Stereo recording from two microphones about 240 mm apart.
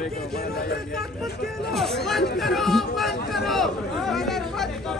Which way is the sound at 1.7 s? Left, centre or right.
Centre.